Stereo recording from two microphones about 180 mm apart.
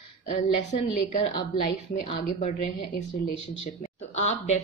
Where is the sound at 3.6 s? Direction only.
40° left (ahead or behind).